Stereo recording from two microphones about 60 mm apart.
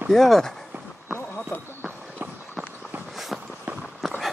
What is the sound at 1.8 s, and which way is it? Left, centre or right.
Run, right.